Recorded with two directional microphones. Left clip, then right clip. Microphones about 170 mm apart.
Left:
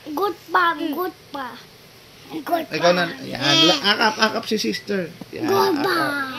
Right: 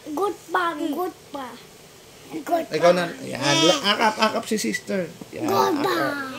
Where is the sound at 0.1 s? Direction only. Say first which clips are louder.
Left 3 dB; 5° right (ahead or behind).